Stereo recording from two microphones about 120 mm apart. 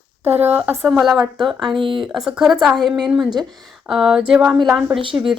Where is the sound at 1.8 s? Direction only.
45° right (ahead or behind).